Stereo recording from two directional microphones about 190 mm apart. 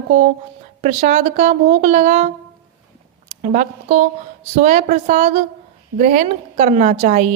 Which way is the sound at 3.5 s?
40° right (ahead or behind).